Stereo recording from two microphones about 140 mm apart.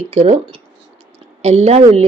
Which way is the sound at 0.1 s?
50° right (ahead or behind).